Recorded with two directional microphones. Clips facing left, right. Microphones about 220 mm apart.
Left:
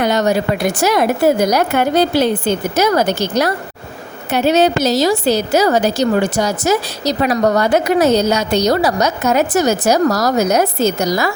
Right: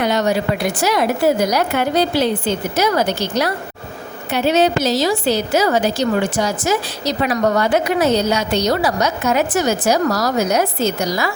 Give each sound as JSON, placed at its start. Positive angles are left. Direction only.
{"t": 0.0, "sound": "a woman's voice", "side_deg": 45}